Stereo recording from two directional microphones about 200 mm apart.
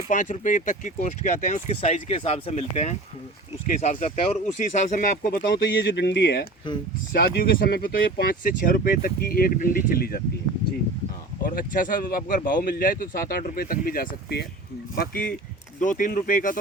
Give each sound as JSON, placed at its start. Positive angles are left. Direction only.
{"t": 0.1, "sound": "speech", "side_deg": 40}
{"t": 11.4, "sound": "speech", "side_deg": 45}